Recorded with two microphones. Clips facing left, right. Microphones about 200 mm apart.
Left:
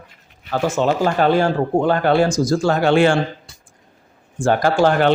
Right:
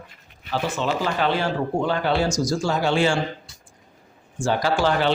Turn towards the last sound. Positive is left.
turn(degrees=50)  # may be behind; listen again after turning